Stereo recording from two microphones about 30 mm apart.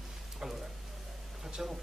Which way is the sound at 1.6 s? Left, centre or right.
Centre.